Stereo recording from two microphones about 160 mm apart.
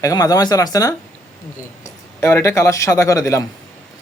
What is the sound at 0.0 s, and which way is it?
A man's voice, 20° left (ahead or behind).